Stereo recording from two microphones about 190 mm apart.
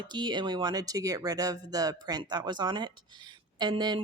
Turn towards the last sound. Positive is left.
turn(degrees=-20)  # may be behind; listen again after turning